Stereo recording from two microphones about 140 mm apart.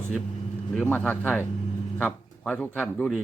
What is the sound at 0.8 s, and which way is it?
A man's voice, 10° left (ahead or behind).